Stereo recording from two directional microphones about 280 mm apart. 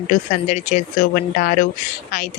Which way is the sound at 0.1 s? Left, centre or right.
Left.